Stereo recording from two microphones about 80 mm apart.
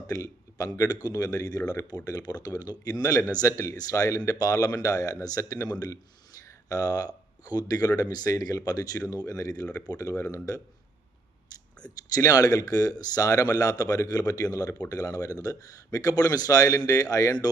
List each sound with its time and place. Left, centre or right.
0.1 s speech: left
12.0 s speech: left